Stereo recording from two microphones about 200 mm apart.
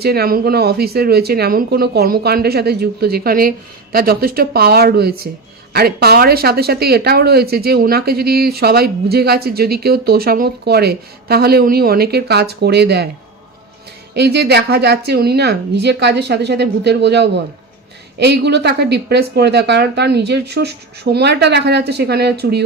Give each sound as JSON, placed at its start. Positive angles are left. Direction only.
{"t": 0.0, "sound": "speech", "side_deg": -50}
{"t": 14.1, "sound": "a woman's voice", "side_deg": -55}